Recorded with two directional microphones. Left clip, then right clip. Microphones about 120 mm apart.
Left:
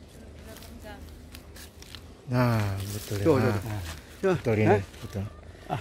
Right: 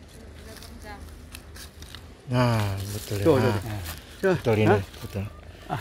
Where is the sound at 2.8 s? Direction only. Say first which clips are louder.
Right 2 dB; 65° right (ahead or behind).